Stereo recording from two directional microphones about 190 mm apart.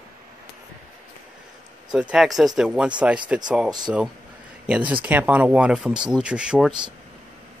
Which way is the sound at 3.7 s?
20° right (ahead or behind).